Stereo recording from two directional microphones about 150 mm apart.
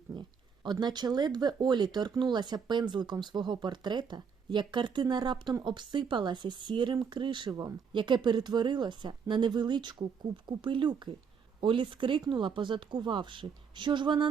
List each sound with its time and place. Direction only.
0.1 s speech: 30° right (ahead or behind)